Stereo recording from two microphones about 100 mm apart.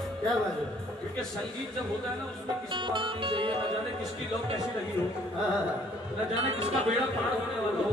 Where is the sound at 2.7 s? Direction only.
55° right (ahead or behind).